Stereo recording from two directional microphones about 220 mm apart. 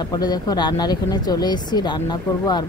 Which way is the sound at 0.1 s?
20° left (ahead or behind).